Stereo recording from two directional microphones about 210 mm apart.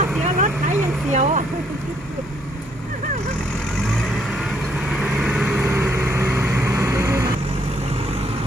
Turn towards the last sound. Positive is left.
turn(degrees=-15)  # may be behind; listen again after turning